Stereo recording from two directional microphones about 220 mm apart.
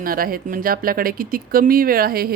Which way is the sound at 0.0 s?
40° right (ahead or behind).